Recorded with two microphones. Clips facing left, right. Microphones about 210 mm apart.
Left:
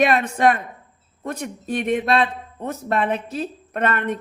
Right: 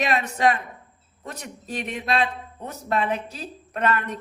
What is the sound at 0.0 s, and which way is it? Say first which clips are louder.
A woman's voice: left 5 dB; 55° left (ahead or behind).